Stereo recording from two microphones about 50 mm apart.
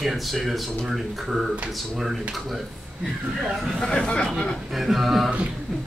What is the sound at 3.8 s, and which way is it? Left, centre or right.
Speech, centre.